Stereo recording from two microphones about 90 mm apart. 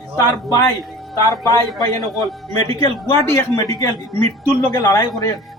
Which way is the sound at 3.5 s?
40° left (ahead or behind).